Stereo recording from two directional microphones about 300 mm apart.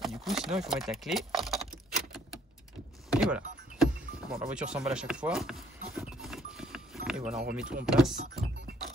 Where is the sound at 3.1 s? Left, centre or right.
Centre.